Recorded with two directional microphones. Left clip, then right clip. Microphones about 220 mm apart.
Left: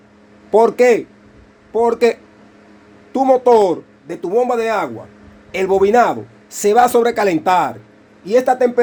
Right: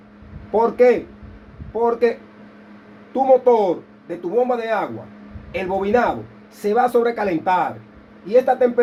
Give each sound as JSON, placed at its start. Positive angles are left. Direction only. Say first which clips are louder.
{"t": 0.5, "sound": "a man's voice", "louder": "left 4 dB", "side_deg": 55}